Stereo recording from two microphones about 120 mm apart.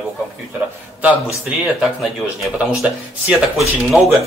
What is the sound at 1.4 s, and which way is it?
A man's voice, centre (ahead or behind).